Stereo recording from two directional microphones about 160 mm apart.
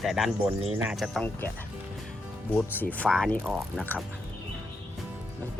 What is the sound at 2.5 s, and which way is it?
Speech, 10° left (ahead or behind).